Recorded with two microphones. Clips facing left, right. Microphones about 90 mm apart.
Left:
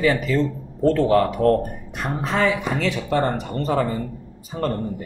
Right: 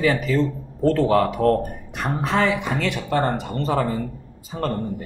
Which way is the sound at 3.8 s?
5° right (ahead or behind).